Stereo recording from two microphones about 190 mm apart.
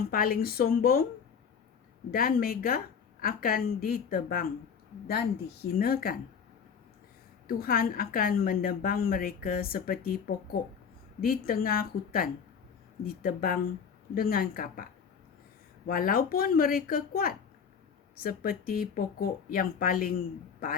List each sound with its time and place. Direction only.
0.1 s a woman's voice: 50° left (ahead or behind)
2.0 s a woman's voice: 50° left (ahead or behind)
5.8 s a woman's voice: 50° left (ahead or behind)
7.4 s a woman's voice: 50° left (ahead or behind)
15.9 s a woman's voice: 50° left (ahead or behind)